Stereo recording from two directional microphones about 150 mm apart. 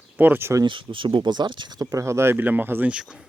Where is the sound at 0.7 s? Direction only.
35° right (ahead or behind).